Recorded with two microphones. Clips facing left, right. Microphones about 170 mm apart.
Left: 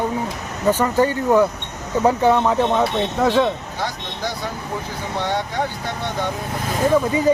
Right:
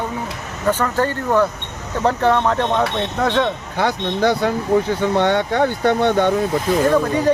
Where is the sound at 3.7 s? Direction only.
60° right (ahead or behind).